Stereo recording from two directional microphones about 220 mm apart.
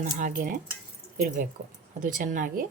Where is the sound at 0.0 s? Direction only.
35° right (ahead or behind).